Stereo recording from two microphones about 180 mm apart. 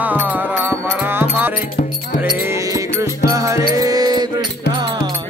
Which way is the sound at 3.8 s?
20° right (ahead or behind).